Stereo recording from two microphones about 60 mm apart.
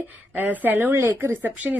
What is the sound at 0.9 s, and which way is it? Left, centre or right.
Speech, right.